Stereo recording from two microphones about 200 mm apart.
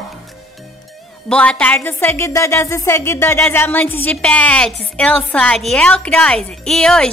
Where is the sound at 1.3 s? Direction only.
5° left (ahead or behind).